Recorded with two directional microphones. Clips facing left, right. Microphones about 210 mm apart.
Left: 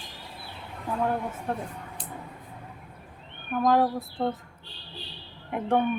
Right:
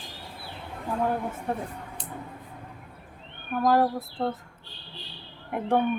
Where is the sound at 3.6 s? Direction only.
5° right (ahead or behind).